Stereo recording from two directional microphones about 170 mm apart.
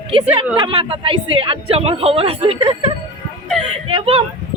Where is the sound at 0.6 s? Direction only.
30° right (ahead or behind).